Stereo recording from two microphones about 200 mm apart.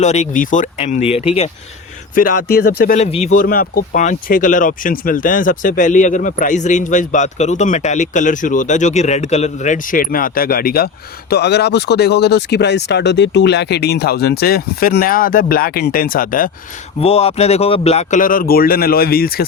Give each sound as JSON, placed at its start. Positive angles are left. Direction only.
{"t": 0.0, "sound": "speech", "side_deg": 35}
{"t": 2.1, "sound": "speech", "side_deg": 45}
{"t": 3.0, "sound": "speech", "side_deg": 35}
{"t": 17.0, "sound": "speech", "side_deg": 30}